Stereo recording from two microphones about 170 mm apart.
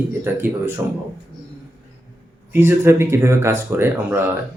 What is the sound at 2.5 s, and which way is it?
A man's voice, 15° right (ahead or behind).